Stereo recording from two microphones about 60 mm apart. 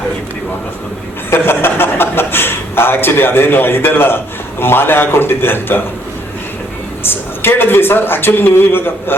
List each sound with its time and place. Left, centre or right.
1.3 s a man's voice: left
7.0 s speech: left